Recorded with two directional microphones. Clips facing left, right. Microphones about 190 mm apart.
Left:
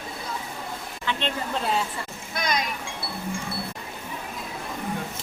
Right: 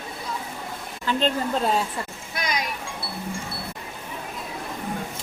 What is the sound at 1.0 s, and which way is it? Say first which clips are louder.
Speech: right 5 dB; 40° right (ahead or behind).